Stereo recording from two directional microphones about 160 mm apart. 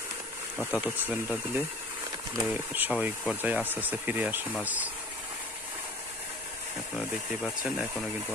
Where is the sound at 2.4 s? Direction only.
10° right (ahead or behind).